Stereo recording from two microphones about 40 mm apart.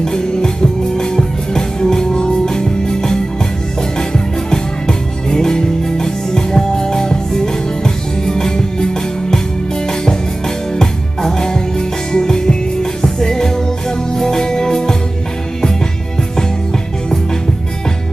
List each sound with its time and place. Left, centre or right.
0.0 s music: centre
10.8 s music: centre